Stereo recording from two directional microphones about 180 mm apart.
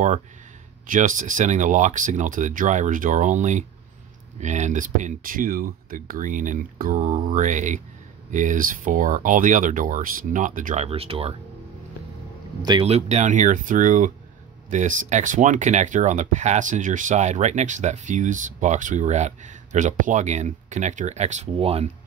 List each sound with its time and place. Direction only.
0.8 s speech: 45° right (ahead or behind)
10.9 s speech: 30° right (ahead or behind)
12.6 s speech: 30° right (ahead or behind)